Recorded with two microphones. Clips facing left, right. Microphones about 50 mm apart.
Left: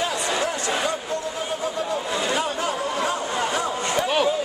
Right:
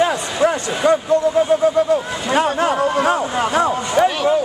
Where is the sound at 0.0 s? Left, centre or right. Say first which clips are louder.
Right 8 dB; right.